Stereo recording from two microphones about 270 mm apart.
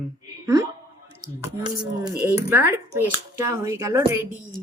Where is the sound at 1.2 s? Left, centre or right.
Centre.